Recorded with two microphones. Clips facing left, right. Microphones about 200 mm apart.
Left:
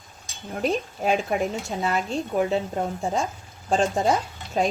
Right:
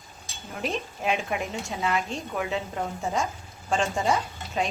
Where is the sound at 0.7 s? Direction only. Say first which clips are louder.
Left 4 dB; 35° left (ahead or behind).